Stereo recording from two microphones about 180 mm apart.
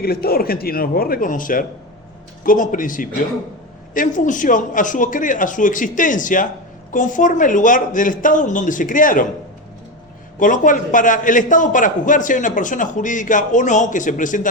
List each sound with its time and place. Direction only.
0.0 s a man's voice: 55° left (ahead or behind)
10.4 s a man's voice: 45° left (ahead or behind)